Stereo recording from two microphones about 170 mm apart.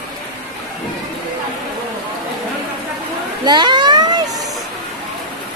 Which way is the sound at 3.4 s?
25° right (ahead or behind).